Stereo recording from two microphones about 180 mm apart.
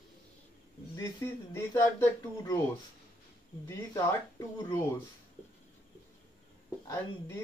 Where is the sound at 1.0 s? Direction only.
15° left (ahead or behind).